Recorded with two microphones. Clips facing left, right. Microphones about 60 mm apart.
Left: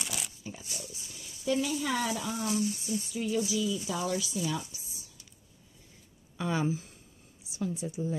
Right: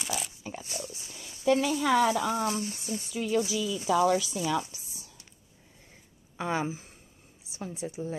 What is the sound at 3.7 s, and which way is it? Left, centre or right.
A woman's voice, right.